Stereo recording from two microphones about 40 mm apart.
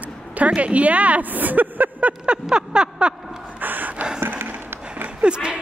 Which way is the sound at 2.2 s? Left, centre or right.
Right.